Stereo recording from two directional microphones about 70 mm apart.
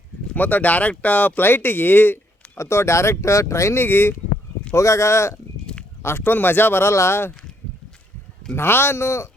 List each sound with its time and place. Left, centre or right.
0.3 s speech: left
4.7 s speech: left
8.5 s speech: left